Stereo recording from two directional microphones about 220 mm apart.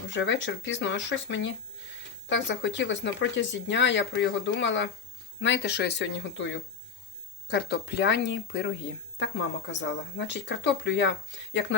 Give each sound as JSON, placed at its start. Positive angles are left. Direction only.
{"t": 0.1, "sound": "speech", "side_deg": 55}
{"t": 9.8, "sound": "speech", "side_deg": 55}